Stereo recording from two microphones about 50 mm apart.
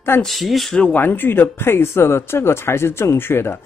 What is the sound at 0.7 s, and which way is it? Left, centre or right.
Speech, centre.